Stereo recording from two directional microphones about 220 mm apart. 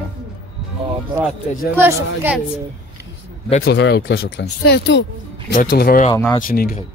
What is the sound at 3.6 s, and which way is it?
Speech, 50° left (ahead or behind).